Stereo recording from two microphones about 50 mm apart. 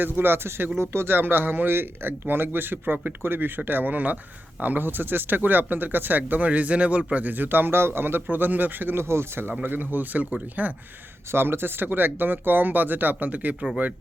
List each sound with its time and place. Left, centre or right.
0.0 s speech: right
9.0 s speech: right
11.3 s speech: right